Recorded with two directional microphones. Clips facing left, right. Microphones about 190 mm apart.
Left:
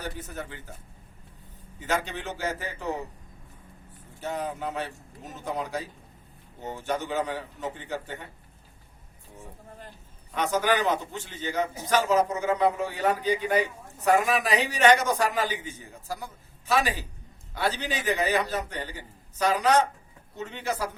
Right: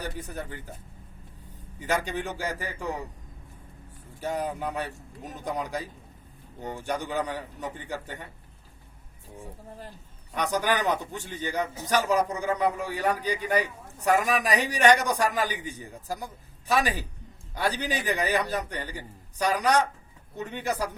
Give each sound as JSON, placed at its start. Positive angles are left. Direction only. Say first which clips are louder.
{"t": 0.0, "sound": "a man's voice", "louder": "right 1 dB", "side_deg": -15}
{"t": 1.9, "sound": "a man's voice", "louder": "right 1 dB", "side_deg": -15}
{"t": 4.2, "sound": "a man's voice", "louder": "right 2 dB", "side_deg": -10}
{"t": 10.4, "sound": "a man's voice", "louder": "left 1 dB", "side_deg": -15}